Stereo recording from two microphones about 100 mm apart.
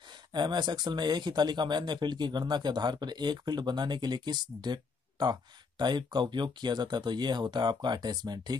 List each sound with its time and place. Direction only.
0.3 s speech: 50° right (ahead or behind)